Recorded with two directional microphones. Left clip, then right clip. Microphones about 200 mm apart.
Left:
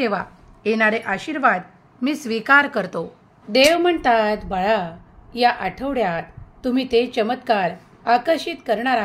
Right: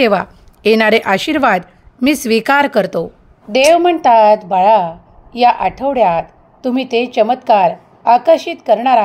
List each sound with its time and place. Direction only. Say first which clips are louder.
0.0 s a woman's voice: right 10 dB; 40° right (ahead or behind)
3.5 s a woman's voice: right 6 dB; 15° right (ahead or behind)